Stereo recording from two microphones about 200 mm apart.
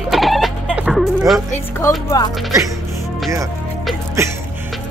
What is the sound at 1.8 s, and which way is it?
Speech, 15° left (ahead or behind).